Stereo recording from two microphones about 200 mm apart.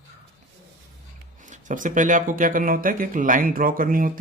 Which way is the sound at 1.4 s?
40° right (ahead or behind).